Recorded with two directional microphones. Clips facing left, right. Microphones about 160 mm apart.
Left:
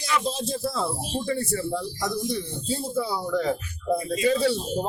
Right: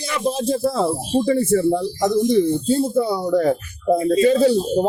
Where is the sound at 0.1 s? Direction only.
55° right (ahead or behind).